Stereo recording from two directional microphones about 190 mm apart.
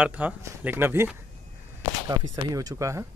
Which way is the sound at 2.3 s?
20° right (ahead or behind).